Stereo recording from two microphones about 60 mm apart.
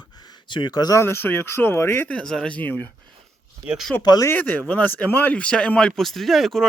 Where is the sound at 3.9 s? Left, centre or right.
Left.